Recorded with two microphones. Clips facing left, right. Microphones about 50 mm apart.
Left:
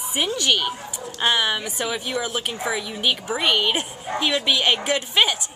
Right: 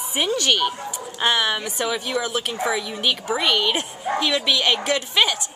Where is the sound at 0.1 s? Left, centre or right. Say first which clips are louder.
Right 1 dB; centre.